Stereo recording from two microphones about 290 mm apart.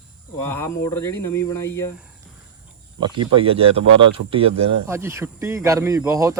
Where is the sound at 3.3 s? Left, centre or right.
Centre.